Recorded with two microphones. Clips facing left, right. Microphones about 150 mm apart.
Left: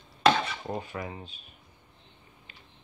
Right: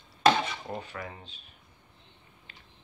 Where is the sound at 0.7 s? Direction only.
15° left (ahead or behind).